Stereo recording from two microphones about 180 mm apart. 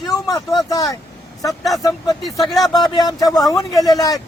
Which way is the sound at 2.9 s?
20° left (ahead or behind).